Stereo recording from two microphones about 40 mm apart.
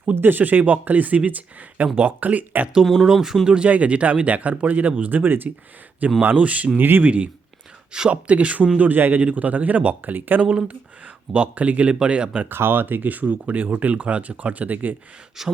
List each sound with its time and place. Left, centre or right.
0.0 s speech: right
2.8 s speech: centre
3.4 s speech: right
3.7 s speech: right
6.2 s speech: right
6.7 s speech: right
7.0 s speech: right
8.8 s speech: right
9.2 s speech: right
11.3 s speech: right
12.5 s speech: right
15.4 s speech: centre